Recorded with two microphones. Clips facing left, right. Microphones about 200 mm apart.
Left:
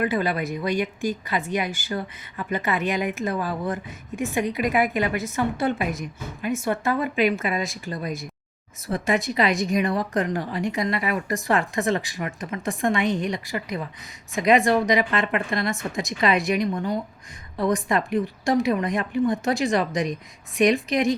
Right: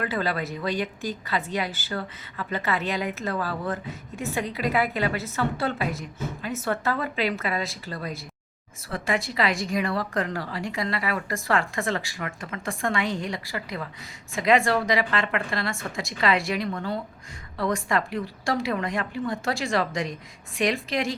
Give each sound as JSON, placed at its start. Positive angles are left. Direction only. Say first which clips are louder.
{"t": 0.0, "sound": "a woman's voice", "louder": "left 4 dB", "side_deg": 15}